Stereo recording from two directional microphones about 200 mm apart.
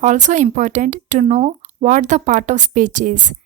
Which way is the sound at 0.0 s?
35° right (ahead or behind).